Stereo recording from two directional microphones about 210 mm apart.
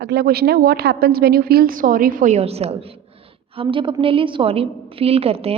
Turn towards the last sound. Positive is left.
turn(degrees=-30)  # may be behind; listen again after turning